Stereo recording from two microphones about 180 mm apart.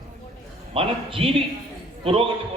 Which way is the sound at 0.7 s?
30° right (ahead or behind).